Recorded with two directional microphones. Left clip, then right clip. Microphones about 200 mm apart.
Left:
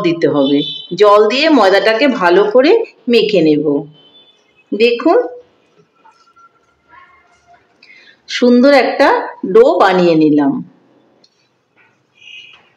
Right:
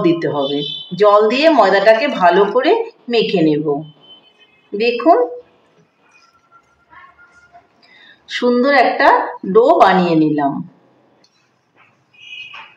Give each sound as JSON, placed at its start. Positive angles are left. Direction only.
{"t": 0.0, "sound": "a woman's voice", "side_deg": 55}
{"t": 4.7, "sound": "a woman's voice", "side_deg": 50}
{"t": 8.3, "sound": "a woman's voice", "side_deg": 50}